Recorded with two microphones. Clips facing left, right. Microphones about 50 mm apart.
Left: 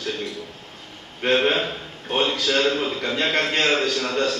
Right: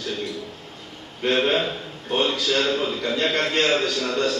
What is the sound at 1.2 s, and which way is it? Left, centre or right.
Speech, left.